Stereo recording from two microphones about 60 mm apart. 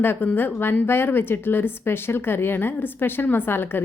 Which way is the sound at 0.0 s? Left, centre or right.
Left.